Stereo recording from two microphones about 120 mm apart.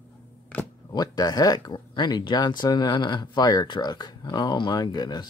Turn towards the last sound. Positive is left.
turn(degrees=35)  # may be behind; listen again after turning